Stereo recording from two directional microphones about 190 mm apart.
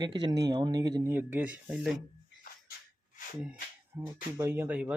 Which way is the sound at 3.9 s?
15° right (ahead or behind).